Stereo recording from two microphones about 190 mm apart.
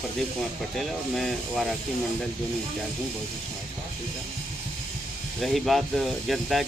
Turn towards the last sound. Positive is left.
turn(degrees=0)  # may be behind; listen again after turning